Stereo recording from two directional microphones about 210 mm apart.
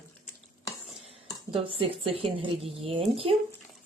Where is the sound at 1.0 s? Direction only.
25° right (ahead or behind).